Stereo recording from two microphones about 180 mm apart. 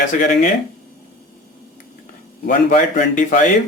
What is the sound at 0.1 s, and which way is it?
Speech, 45° left (ahead or behind).